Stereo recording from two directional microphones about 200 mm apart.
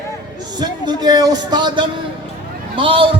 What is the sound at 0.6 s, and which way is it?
A man's voice, 20° right (ahead or behind).